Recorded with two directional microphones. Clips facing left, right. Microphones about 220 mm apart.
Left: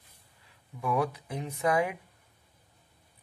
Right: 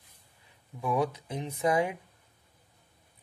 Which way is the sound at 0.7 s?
15° right (ahead or behind).